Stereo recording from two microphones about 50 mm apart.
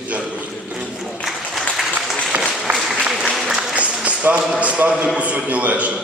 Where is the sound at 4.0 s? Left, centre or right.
Right.